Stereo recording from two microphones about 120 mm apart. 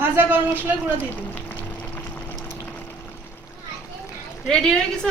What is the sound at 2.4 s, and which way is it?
Pump, 15° left (ahead or behind).